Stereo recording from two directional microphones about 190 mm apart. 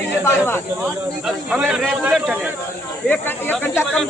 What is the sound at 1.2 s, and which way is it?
Speech, 5° right (ahead or behind).